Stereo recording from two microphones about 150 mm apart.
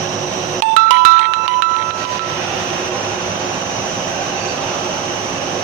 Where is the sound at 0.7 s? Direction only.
60° right (ahead or behind).